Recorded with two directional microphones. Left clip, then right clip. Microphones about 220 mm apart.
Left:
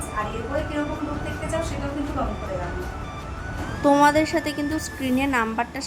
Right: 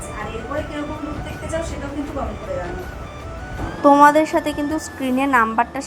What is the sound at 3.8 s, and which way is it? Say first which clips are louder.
A woman's voice: right 6 dB; 5° right (ahead or behind).